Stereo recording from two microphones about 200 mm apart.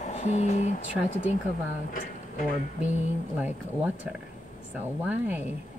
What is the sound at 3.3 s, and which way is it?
Speech, 10° right (ahead or behind).